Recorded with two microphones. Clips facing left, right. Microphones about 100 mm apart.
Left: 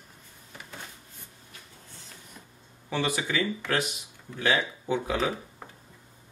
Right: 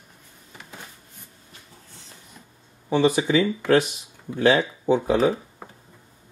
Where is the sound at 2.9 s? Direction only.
20° right (ahead or behind).